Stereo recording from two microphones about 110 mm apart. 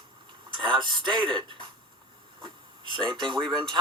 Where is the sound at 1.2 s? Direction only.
5° left (ahead or behind).